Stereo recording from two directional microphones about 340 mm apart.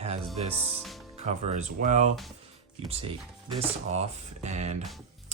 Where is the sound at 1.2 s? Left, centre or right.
Centre.